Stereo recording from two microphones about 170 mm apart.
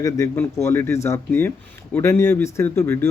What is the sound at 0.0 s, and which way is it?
A man's voice, 20° left (ahead or behind).